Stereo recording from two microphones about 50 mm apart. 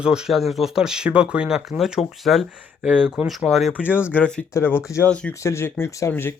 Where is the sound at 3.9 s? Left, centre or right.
Left.